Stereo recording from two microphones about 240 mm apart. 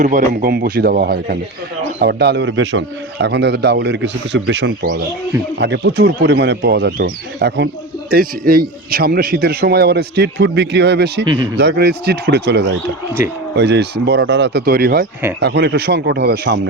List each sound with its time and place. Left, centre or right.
0.0 s a man's voice: right